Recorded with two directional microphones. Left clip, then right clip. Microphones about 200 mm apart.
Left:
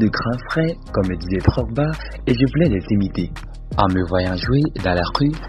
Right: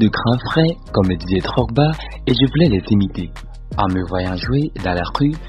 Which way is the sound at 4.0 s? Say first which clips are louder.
Left 2 dB; 15° left (ahead or behind).